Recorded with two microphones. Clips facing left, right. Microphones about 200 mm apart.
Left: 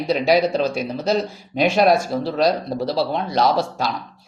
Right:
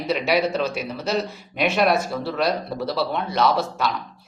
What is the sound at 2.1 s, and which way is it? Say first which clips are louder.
Speech: left 4 dB; 25° left (ahead or behind).